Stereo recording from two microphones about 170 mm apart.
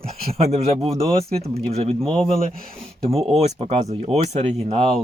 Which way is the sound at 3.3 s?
40° right (ahead or behind).